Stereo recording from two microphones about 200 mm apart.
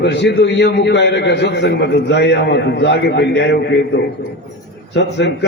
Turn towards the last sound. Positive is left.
turn(degrees=60)  # may be behind; listen again after turning